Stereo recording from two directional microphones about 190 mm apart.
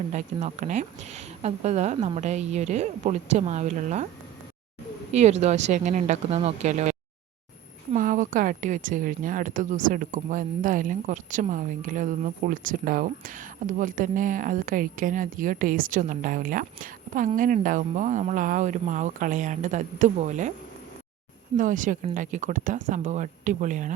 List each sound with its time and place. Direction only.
0.1 s speech: 35° right (ahead or behind)
5.1 s speech: 35° right (ahead or behind)
7.9 s speech: 45° right (ahead or behind)
21.6 s speech: 45° right (ahead or behind)